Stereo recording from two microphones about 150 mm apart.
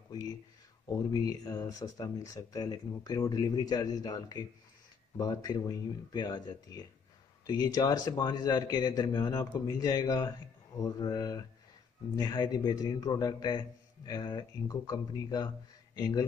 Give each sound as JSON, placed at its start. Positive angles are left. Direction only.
{"t": 0.8, "sound": "speech", "side_deg": 25}